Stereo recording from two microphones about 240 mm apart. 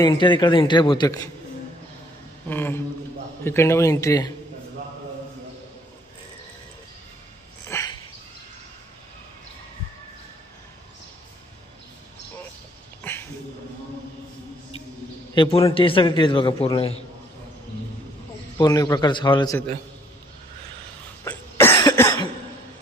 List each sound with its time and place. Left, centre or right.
0.0 s a man's voice: centre
2.4 s a man's voice: centre
7.6 s dog: centre
13.0 s a sound: centre
15.3 s a man's voice: left
18.6 s a man's voice: centre
21.2 s cough: centre